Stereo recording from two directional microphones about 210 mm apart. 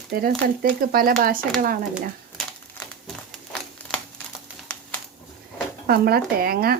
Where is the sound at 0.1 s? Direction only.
45° right (ahead or behind).